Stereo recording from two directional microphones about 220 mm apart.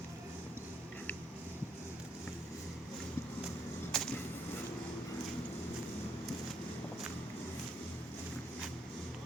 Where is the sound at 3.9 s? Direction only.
Centre (ahead or behind).